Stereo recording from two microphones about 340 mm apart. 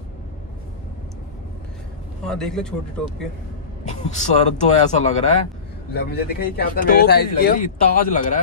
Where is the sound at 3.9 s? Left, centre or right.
Centre.